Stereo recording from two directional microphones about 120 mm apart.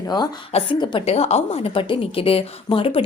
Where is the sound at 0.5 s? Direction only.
45° left (ahead or behind).